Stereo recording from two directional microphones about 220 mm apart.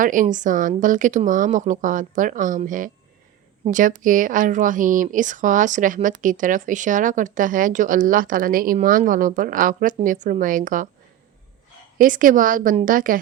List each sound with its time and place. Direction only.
0.0 s a woman's voice: 35° right (ahead or behind)
11.9 s a woman's voice: 40° right (ahead or behind)